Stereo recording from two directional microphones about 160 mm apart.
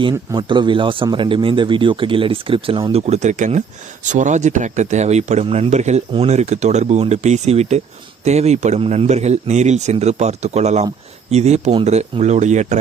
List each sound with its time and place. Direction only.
0.3 s speech: 30° right (ahead or behind); by 12.8 s 50° right (ahead or behind)